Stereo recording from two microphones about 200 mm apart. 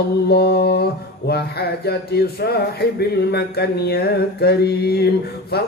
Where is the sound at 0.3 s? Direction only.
55° left (ahead or behind).